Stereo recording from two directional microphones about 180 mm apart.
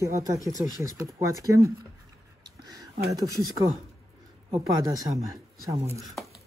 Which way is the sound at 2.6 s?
20° right (ahead or behind).